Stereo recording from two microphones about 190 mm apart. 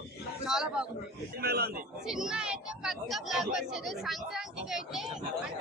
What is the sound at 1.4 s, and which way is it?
Speech, 55° right (ahead or behind).